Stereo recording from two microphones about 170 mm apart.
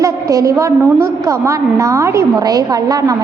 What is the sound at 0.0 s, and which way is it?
A woman's voice, 20° right (ahead or behind).